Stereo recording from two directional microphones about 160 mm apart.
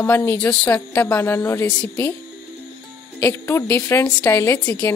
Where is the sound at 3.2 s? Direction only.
15° left (ahead or behind).